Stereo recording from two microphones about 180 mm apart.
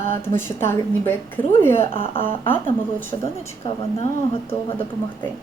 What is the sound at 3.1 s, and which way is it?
Speech, 25° left (ahead or behind).